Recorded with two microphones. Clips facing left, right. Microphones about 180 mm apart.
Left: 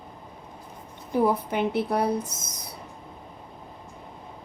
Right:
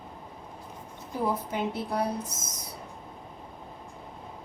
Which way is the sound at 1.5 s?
70° left (ahead or behind).